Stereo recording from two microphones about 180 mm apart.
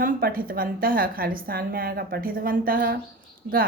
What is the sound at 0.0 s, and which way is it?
A woman's voice, 55° right (ahead or behind).